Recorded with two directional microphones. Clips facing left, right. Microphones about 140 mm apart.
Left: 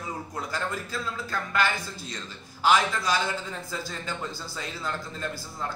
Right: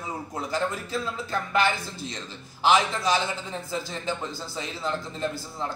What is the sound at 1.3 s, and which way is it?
A man's voice, 20° right (ahead or behind).